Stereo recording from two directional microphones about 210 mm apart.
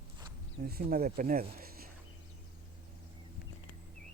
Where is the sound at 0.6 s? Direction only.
45° right (ahead or behind).